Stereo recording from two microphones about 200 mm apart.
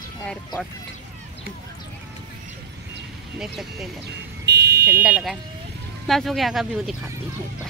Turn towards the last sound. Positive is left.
turn(degrees=0)  # may be behind; listen again after turning